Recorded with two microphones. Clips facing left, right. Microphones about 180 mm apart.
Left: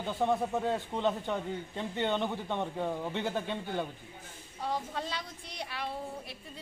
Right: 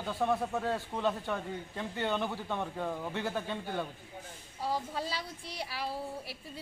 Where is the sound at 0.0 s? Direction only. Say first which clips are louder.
Left 1 dB; 20° left (ahead or behind).